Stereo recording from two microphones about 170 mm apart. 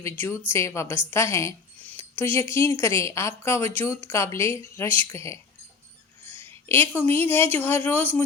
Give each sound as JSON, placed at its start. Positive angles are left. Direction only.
{"t": 0.0, "sound": "speech", "side_deg": 15}
{"t": 6.4, "sound": "speech", "side_deg": 15}